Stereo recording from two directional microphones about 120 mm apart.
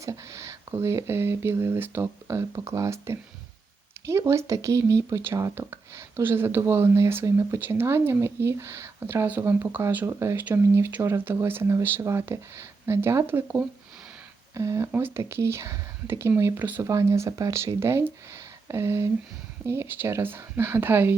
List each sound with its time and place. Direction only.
0.0 s speech: 25° right (ahead or behind)